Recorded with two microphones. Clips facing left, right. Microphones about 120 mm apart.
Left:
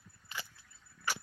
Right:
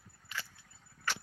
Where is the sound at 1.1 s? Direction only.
10° left (ahead or behind).